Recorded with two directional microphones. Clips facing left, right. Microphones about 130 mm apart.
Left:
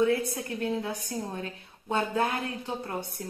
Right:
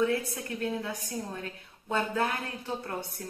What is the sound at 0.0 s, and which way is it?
A woman's voice, 25° left (ahead or behind).